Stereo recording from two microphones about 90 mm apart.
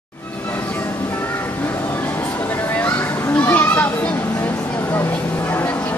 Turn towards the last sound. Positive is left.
turn(degrees=20)  # may be behind; listen again after turning